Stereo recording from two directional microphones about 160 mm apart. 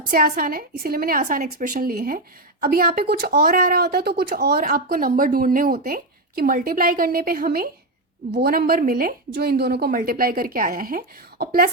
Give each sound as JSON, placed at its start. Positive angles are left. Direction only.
{"t": 0.1, "sound": "a woman's voice", "side_deg": -65}